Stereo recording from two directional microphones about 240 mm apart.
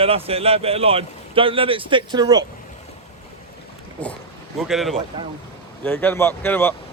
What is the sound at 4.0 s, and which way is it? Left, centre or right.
Speech, centre.